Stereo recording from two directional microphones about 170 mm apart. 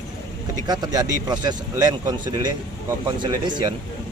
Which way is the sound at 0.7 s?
25° right (ahead or behind).